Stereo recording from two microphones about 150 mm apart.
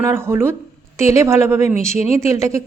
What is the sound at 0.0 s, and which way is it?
A woman's voice, 15° right (ahead or behind).